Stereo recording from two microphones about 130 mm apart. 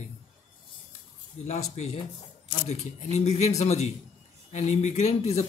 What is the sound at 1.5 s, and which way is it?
A man's voice, 55° left (ahead or behind).